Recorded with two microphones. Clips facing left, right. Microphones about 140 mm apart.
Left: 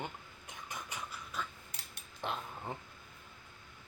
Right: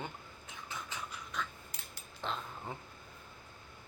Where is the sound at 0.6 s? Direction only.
10° left (ahead or behind).